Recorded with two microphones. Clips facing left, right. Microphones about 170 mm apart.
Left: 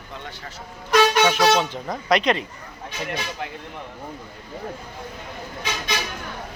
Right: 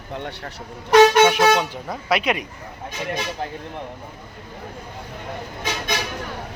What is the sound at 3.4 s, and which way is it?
Speech, 35° right (ahead or behind).